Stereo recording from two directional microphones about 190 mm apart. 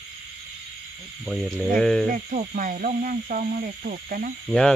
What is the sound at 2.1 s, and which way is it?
Speech, 40° right (ahead or behind).